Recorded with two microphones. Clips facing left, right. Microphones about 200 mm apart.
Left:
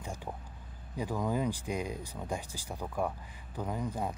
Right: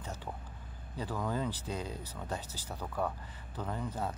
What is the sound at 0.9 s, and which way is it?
Speech, 15° left (ahead or behind).